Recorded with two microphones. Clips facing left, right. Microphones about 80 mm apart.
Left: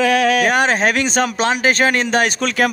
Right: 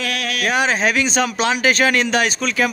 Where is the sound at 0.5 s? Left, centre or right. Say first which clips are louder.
Left 2 dB; left.